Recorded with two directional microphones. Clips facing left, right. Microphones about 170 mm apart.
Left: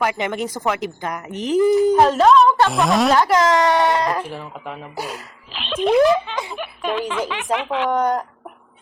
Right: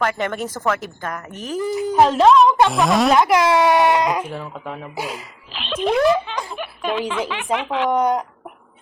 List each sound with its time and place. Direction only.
0.0 s speech: 15° left (ahead or behind)
2.2 s a sound: 15° right (ahead or behind)
2.6 s speech: centre (ahead or behind)
7.9 s speech: 10° right (ahead or behind)